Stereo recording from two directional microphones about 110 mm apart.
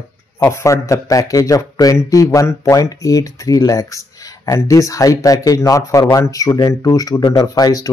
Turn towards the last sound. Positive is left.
turn(degrees=35)  # may be behind; listen again after turning